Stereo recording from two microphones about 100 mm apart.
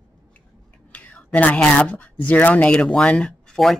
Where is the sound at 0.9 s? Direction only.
15° left (ahead or behind).